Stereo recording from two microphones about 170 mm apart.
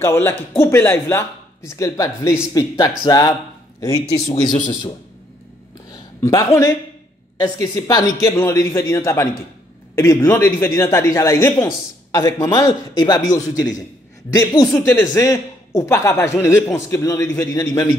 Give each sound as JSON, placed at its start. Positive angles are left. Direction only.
{"t": 0.0, "sound": "a man's voice", "side_deg": 15}
{"t": 5.9, "sound": "a sound", "side_deg": 20}
{"t": 7.3, "sound": "a man's voice", "side_deg": 20}